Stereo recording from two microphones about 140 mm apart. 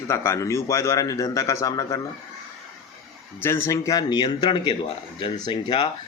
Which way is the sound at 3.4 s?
20° left (ahead or behind).